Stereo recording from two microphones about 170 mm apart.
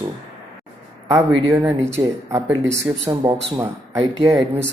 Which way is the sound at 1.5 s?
10° right (ahead or behind).